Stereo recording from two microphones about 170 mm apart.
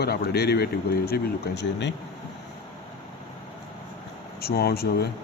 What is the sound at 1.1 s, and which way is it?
Speech, 85° left.